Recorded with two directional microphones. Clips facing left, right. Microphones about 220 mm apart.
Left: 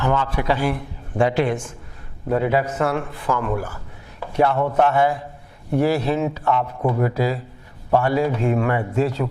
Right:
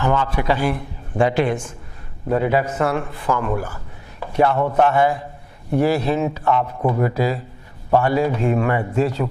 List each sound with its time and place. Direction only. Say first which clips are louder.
0.0 s a man's voice: right 1 dB; 15° right (ahead or behind)